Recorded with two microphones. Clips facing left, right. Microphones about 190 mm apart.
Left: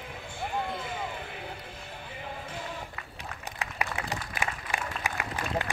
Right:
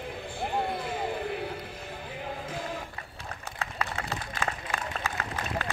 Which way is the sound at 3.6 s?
15° left (ahead or behind).